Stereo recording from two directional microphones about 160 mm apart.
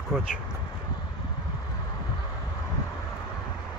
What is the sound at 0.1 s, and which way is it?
Speech, 5° left (ahead or behind).